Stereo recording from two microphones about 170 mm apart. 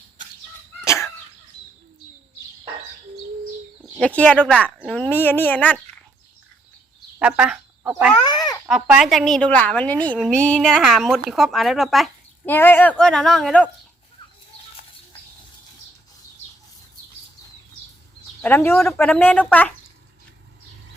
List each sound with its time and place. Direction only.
4.0 s speech: 5° left (ahead or behind)
7.2 s speech: 5° right (ahead or behind)
8.2 s a sound: 25° left (ahead or behind)
8.6 s speech: 5° right (ahead or behind)
12.5 s speech: 15° left (ahead or behind)
18.4 s speech: 15° left (ahead or behind)